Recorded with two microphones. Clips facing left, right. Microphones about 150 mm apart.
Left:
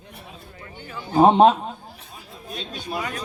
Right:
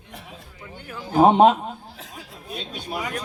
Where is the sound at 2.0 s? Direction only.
90° right.